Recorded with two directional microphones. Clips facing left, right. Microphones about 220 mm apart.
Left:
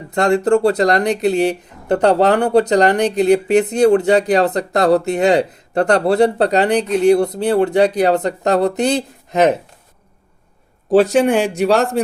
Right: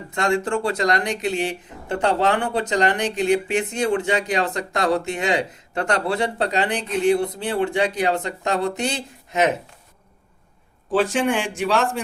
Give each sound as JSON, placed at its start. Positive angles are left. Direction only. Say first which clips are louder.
{"t": 0.1, "sound": "speech", "louder": "left 8 dB", "side_deg": 40}
{"t": 10.9, "sound": "speech", "louder": "left 8 dB", "side_deg": 40}